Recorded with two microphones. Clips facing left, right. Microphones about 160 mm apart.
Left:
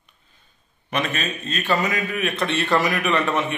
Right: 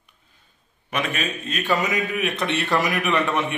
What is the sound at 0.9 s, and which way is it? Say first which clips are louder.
A man's voice: left 1 dB; 5° right (ahead or behind).